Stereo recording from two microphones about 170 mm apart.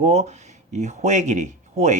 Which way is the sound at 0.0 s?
40° right (ahead or behind).